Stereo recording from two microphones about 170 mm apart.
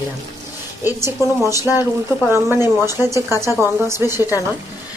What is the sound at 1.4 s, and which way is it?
Speech, 15° right (ahead or behind).